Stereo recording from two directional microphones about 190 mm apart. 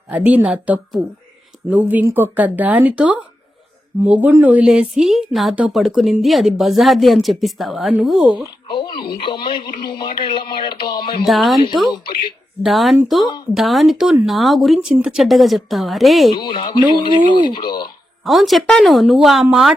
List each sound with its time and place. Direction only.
0.1 s a woman's voice: 5° right (ahead or behind)
8.6 s a sound: 25° left (ahead or behind)
9.2 s speech: 25° left (ahead or behind)
11.3 s a woman's voice: centre (ahead or behind)
12.6 s a woman's voice: centre (ahead or behind)
16.4 s speech: 25° left (ahead or behind)
18.2 s a woman's voice: centre (ahead or behind)